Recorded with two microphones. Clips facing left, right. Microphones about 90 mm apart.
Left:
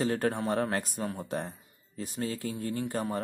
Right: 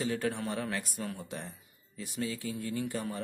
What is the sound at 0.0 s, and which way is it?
Speech, 45° left (ahead or behind).